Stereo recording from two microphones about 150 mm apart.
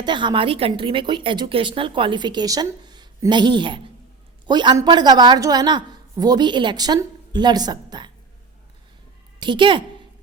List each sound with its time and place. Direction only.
0.0 s a woman's voice: 30° right (ahead or behind)
9.4 s a woman's voice: 30° right (ahead or behind)